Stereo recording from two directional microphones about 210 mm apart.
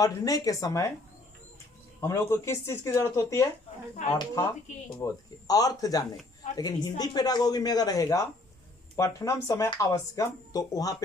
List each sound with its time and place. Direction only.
0.0 s speech: 15° left (ahead or behind)
2.0 s speech: 15° left (ahead or behind)
4.9 s speech: 15° left (ahead or behind)